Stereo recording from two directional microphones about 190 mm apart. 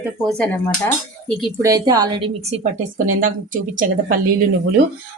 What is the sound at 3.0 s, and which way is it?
Speech, 45° right (ahead or behind).